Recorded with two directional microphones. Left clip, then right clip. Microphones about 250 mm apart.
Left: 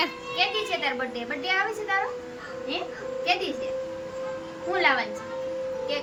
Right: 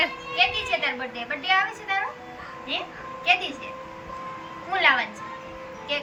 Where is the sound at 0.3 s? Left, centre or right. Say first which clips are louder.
Right 3 dB; centre.